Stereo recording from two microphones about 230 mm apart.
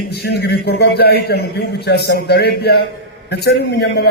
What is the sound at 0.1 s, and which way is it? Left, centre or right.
A man's voice, left.